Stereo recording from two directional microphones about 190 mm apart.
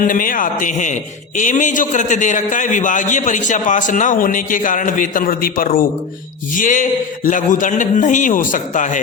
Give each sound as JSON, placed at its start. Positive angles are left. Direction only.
{"t": 0.0, "sound": "a man's voice", "side_deg": 45}